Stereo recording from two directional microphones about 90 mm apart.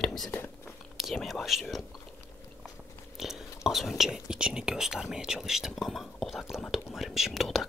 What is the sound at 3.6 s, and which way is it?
Speech, centre (ahead or behind).